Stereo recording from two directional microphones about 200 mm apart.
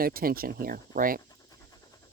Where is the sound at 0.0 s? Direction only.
45° right (ahead or behind).